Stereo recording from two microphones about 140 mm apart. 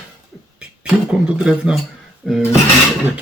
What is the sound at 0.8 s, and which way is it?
Speech, 5° right (ahead or behind).